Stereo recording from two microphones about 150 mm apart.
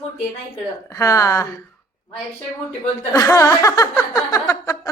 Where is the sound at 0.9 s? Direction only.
20° left (ahead or behind).